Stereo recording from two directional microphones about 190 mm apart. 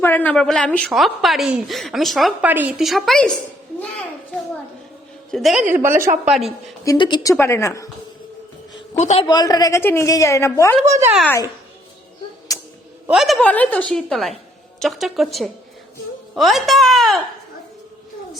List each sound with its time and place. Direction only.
0.0 s a woman's voice: 10° left (ahead or behind)
5.3 s a woman's voice: centre (ahead or behind)
6.8 s a woman's voice: 25° left (ahead or behind)
9.0 s a man's voice: 40° left (ahead or behind)
9.2 s a woman's voice: 20° left (ahead or behind)
11.0 s a woman's voice: 5° right (ahead or behind)
12.5 s a sound: 20° left (ahead or behind)
13.1 s a woman's voice: centre (ahead or behind)